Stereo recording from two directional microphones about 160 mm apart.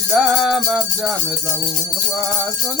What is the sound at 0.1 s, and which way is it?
Music, 5° right (ahead or behind).